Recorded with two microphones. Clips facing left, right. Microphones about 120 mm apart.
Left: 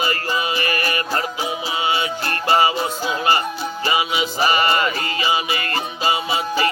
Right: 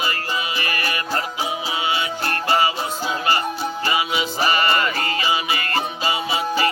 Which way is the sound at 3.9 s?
15° left (ahead or behind).